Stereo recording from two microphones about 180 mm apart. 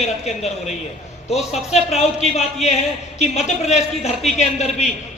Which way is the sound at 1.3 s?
35° left (ahead or behind).